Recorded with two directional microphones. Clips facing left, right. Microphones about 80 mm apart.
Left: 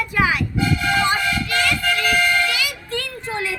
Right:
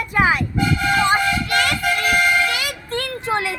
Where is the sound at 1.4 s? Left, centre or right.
Right.